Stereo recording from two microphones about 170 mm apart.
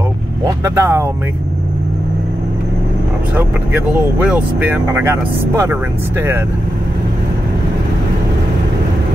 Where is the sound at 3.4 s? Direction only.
10° right (ahead or behind).